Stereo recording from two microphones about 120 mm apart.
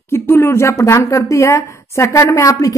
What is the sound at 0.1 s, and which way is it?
A woman's voice, 20° left (ahead or behind).